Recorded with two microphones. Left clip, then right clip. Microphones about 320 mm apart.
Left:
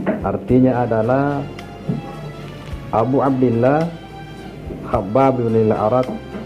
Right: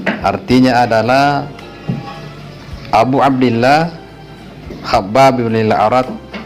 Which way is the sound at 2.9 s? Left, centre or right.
Right.